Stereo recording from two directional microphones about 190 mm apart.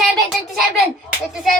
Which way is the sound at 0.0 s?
Centre (ahead or behind).